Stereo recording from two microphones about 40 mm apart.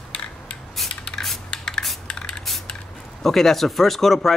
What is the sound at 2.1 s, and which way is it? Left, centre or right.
Spray, centre.